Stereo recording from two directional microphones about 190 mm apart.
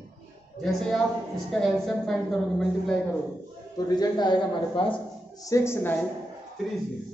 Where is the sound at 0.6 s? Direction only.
Centre (ahead or behind).